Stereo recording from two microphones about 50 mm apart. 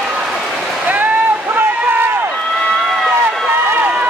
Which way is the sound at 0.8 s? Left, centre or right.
Right.